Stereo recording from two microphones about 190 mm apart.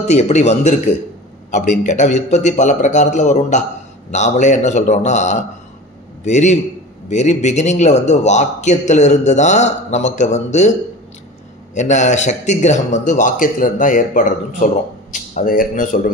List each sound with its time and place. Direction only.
0.0 s a man's voice: 35° left (ahead or behind)
11.7 s a man's voice: 40° left (ahead or behind)